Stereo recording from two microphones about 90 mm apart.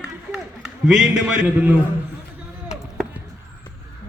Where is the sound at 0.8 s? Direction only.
5° right (ahead or behind).